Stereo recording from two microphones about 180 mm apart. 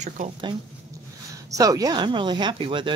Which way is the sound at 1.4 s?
20° right (ahead or behind).